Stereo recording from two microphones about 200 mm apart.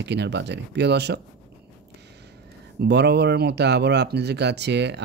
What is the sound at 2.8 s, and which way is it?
Speech, 55° right (ahead or behind).